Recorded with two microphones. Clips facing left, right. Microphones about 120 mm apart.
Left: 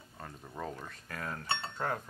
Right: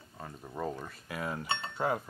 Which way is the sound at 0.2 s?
5° right (ahead or behind).